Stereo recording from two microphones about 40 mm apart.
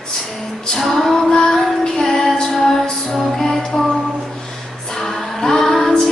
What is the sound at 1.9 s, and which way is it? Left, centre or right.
Music, centre.